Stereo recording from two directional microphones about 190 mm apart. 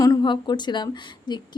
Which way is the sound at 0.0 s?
20° left (ahead or behind).